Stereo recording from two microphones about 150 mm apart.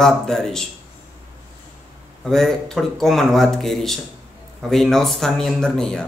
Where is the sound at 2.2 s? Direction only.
Centre (ahead or behind).